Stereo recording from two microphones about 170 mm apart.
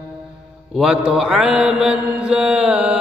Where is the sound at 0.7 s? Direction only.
5° right (ahead or behind).